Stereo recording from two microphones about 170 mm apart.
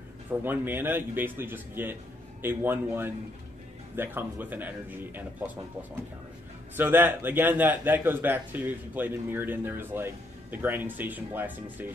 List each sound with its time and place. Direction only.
0.4 s a man's voice: 10° right (ahead or behind)
6.8 s a man's voice: 10° right (ahead or behind)